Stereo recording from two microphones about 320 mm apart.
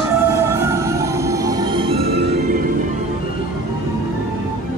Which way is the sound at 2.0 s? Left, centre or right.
Right.